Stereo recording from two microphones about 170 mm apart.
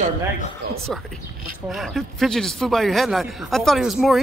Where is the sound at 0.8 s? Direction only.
5° left (ahead or behind).